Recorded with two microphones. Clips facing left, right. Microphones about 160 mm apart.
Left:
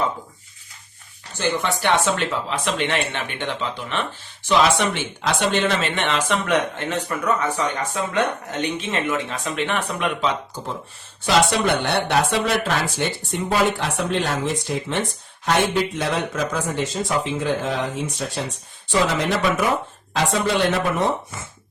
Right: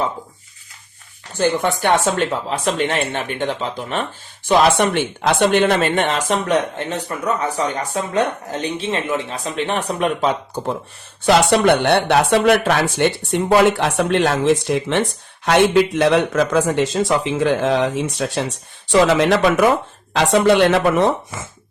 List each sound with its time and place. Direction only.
1.3 s speech: 50° right (ahead or behind)
4.4 s speech: 50° right (ahead or behind)
11.3 s speech: 65° right (ahead or behind); by 21.4 s 90° right